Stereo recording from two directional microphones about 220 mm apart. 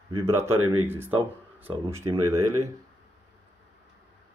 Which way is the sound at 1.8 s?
15° right (ahead or behind).